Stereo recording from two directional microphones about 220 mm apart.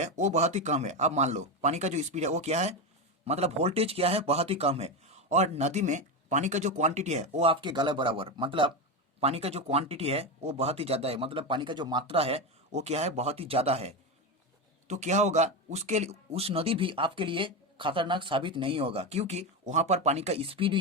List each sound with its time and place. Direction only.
0.0 s speech: 30° right (ahead or behind)